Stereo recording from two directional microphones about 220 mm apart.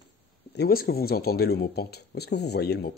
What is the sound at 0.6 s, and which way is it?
Speech, 45° left (ahead or behind).